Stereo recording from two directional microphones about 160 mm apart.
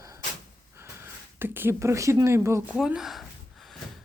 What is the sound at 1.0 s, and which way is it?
Speech, 15° right (ahead or behind).